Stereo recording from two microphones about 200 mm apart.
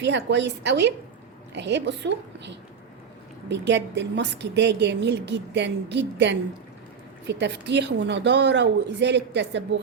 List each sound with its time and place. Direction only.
0.0 s a woman's voice: 60° right (ahead or behind)
3.5 s a woman's voice: 60° right (ahead or behind)